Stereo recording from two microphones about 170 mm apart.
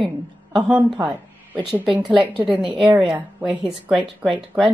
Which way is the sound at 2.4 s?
10° right (ahead or behind).